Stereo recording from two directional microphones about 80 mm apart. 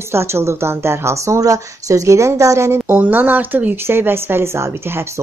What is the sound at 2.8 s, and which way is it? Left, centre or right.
Speech, right.